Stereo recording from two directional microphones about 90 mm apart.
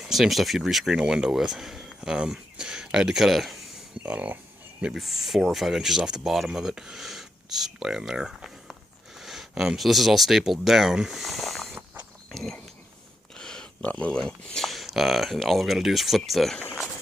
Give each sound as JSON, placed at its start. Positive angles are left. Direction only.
{"t": 0.0, "sound": "speech", "side_deg": 0}
{"t": 4.0, "sound": "speech", "side_deg": -15}
{"t": 4.8, "sound": "speech", "side_deg": -5}
{"t": 12.3, "sound": "a sound", "side_deg": 5}
{"t": 14.2, "sound": "speech", "side_deg": 5}